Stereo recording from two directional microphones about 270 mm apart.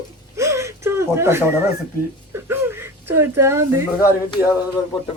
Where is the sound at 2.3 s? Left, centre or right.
Centre.